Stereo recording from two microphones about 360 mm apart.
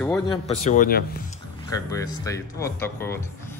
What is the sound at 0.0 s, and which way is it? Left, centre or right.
Speech, centre.